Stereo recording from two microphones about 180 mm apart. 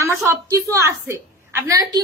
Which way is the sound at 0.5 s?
15° right (ahead or behind).